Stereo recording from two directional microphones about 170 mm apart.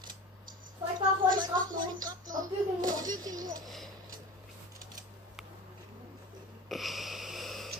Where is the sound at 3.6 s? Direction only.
Centre (ahead or behind).